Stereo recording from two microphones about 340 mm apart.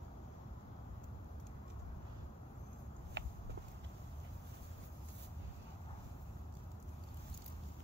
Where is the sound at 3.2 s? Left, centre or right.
Right.